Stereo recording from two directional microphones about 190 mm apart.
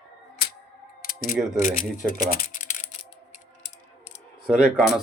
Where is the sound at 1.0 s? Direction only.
50° left (ahead or behind).